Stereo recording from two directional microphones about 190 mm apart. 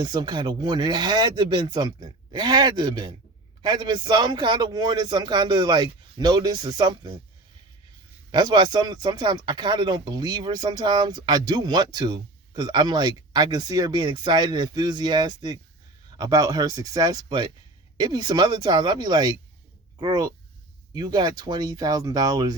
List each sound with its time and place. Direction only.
0.0 s speech: 20° right (ahead or behind)
8.3 s speech: 20° right (ahead or behind)